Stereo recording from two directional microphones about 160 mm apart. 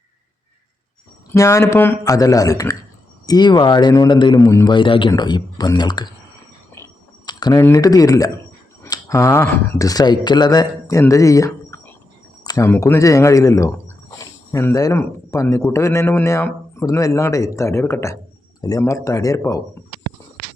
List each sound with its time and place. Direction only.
1.3 s a man's voice: 20° left (ahead or behind)
7.3 s a man's voice: 25° left (ahead or behind)